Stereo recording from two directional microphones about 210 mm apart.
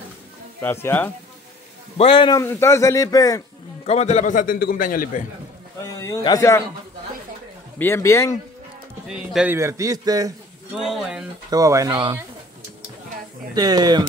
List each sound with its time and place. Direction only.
0.6 s speech: 10° left (ahead or behind)
2.0 s speech: 25° left (ahead or behind)
3.8 s a man's voice: 30° left (ahead or behind)
5.9 s speech: 15° left (ahead or behind)
7.8 s speech: 15° left (ahead or behind)
9.0 s a man's voice: 5° right (ahead or behind)
10.7 s speech: 5° right (ahead or behind)
11.5 s a man's voice: 15° right (ahead or behind)
13.6 s speech: 20° right (ahead or behind)